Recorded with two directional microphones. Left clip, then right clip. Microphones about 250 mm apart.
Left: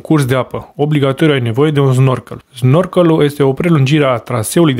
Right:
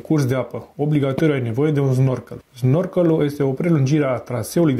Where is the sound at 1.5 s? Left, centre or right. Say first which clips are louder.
Left 7 dB; left.